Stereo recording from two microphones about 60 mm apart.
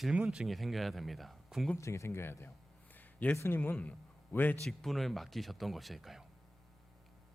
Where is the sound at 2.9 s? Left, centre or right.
Left.